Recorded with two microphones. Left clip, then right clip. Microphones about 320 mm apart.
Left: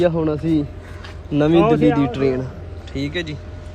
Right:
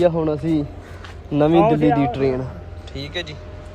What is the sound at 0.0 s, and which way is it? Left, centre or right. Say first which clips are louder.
A man's voice: even; right.